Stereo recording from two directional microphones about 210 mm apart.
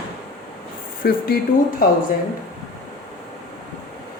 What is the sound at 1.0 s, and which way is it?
Speech, 45° left (ahead or behind).